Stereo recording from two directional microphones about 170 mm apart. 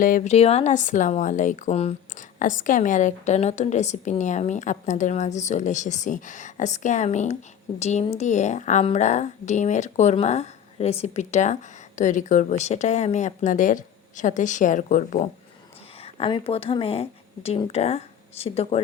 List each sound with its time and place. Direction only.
0.0 s a woman's voice: 55° left (ahead or behind)
0.3 s a woman's voice: 40° left (ahead or behind)
2.4 s a woman's voice: 50° left (ahead or behind)
16.0 s speech: 35° left (ahead or behind)